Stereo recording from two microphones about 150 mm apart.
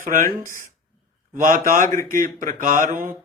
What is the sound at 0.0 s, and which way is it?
Speech, 60° right (ahead or behind).